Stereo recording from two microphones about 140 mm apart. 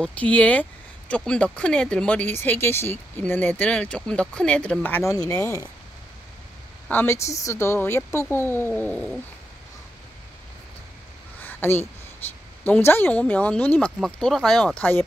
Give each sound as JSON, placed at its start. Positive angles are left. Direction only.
{"t": 0.0, "sound": "speech", "side_deg": 10}
{"t": 6.9, "sound": "speech", "side_deg": 15}
{"t": 11.4, "sound": "a sound", "side_deg": 15}
{"t": 12.6, "sound": "speech", "side_deg": 15}